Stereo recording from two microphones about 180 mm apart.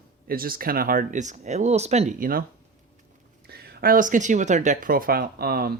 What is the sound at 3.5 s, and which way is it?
Speech, 60° right (ahead or behind).